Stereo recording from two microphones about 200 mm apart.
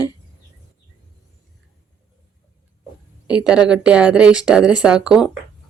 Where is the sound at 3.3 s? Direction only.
5° right (ahead or behind).